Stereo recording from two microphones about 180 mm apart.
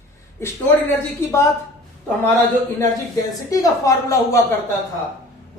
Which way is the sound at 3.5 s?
20° left (ahead or behind).